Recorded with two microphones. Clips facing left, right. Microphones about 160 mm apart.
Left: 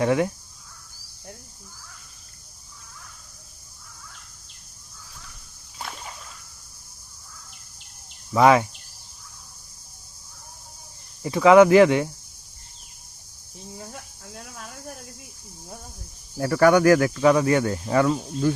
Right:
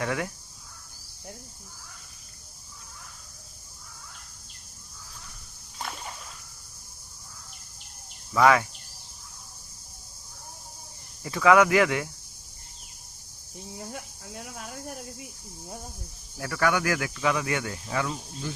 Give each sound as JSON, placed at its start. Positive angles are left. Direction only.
{"t": 0.0, "sound": "speech", "side_deg": 25}
{"t": 5.8, "sound": "a sound", "side_deg": 0}
{"t": 8.3, "sound": "speech", "side_deg": 25}
{"t": 11.2, "sound": "speech", "side_deg": 25}
{"t": 13.7, "sound": "speech", "side_deg": -5}
{"t": 16.4, "sound": "speech", "side_deg": 40}